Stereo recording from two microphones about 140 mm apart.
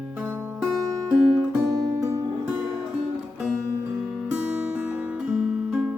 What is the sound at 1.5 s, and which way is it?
Music, 20° right (ahead or behind).